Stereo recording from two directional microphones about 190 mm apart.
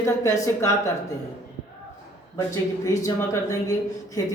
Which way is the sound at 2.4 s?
15° left (ahead or behind).